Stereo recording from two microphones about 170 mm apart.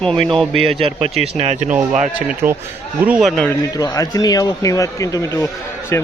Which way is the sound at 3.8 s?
20° left (ahead or behind).